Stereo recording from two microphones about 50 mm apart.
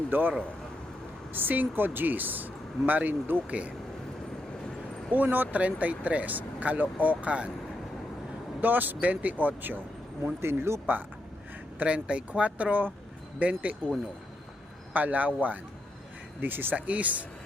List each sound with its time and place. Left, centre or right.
0.1 s speech: right
5.1 s speech: right
8.6 s speech: right
10.4 s speech: right
11.8 s speech: right
14.9 s speech: right
16.7 s speech: right